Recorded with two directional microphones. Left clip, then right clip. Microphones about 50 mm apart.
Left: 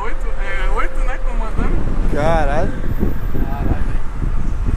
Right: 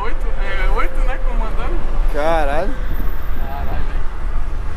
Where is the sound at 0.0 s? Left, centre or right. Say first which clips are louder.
Even; centre.